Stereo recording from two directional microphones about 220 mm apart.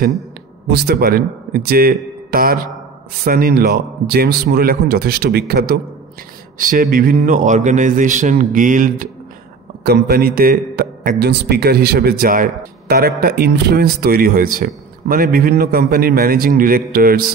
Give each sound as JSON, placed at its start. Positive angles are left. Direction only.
{"t": 0.7, "sound": "a man's voice", "side_deg": -45}